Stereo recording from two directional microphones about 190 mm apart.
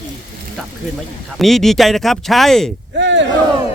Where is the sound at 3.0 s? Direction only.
70° right (ahead or behind).